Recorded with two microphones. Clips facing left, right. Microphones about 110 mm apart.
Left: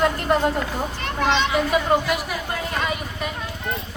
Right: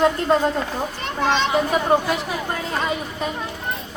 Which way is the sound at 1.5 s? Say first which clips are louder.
Right 1 dB; 30° right (ahead or behind).